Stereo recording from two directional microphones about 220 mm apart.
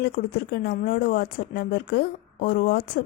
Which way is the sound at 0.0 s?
45° left (ahead or behind).